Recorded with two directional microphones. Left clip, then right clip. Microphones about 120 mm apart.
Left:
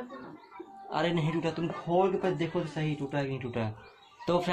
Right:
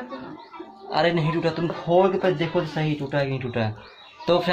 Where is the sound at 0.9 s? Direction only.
35° left (ahead or behind).